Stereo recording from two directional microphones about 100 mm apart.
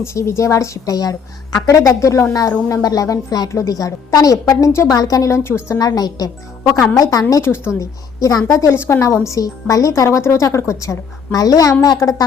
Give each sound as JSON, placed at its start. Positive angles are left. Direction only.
{"t": 0.0, "sound": "a woman's voice", "side_deg": 30}
{"t": 5.8, "sound": "a woman's voice", "side_deg": 40}
{"t": 7.4, "sound": "a woman's voice", "side_deg": 25}